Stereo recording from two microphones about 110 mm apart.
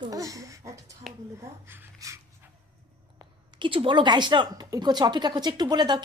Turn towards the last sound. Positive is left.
turn(degrees=-40)  # may be behind; listen again after turning